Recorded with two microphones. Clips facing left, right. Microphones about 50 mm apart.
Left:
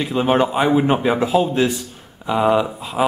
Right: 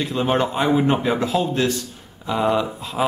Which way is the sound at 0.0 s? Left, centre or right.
Centre.